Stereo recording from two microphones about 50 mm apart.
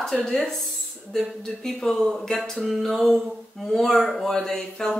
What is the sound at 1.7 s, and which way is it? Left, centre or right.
Speech, centre.